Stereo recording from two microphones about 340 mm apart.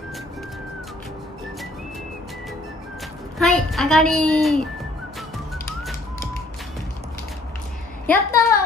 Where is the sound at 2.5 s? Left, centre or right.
Centre.